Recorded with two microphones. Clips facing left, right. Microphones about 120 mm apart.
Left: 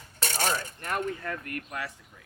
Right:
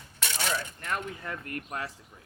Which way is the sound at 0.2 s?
45° left (ahead or behind).